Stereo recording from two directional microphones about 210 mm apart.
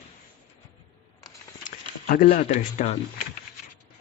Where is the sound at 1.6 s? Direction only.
40° left (ahead or behind).